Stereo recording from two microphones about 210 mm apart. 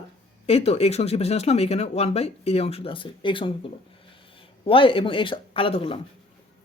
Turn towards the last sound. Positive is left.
turn(degrees=25)  # may be behind; listen again after turning